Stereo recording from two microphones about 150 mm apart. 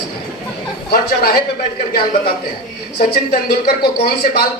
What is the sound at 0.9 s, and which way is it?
Speech, 90° left.